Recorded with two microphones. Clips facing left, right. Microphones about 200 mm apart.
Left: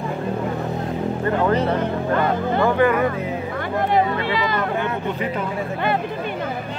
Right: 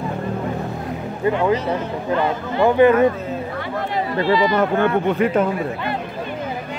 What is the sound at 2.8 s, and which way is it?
Speech, 20° right (ahead or behind).